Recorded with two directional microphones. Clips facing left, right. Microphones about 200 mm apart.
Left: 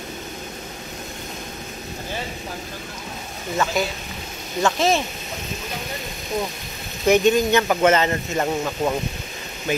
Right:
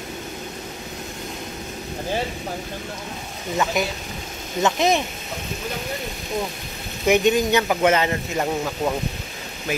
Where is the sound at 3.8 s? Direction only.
20° right (ahead or behind).